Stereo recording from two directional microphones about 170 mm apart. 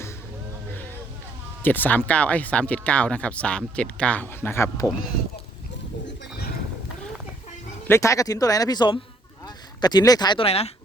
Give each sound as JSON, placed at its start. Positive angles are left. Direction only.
{"t": 1.6, "sound": "speech", "side_deg": 10}
{"t": 7.9, "sound": "speech", "side_deg": 15}